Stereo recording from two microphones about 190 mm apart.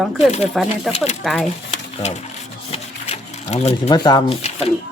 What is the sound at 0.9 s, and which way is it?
Speech, 35° left (ahead or behind).